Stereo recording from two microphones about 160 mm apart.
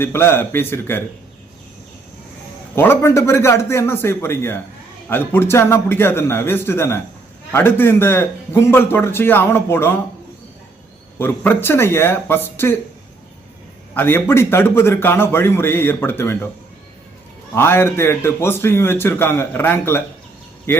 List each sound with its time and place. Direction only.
0.0 s a man's voice: 15° left (ahead or behind)
2.7 s a man's voice: 15° left (ahead or behind)
11.2 s a man's voice: 15° left (ahead or behind)
13.9 s a man's voice: 15° left (ahead or behind)
17.5 s a man's voice: 15° left (ahead or behind)